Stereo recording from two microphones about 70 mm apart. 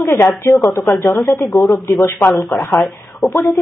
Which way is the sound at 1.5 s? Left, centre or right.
Centre.